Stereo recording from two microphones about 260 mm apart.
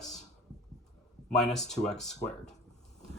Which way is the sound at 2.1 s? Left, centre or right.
Left.